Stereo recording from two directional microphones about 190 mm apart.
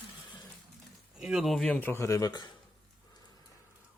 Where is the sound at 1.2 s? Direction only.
5° right (ahead or behind); by 2.5 s 20° left (ahead or behind).